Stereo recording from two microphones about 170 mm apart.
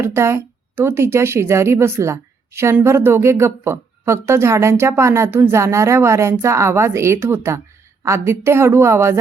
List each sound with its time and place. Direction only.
0.0 s a woman's voice: 15° right (ahead or behind)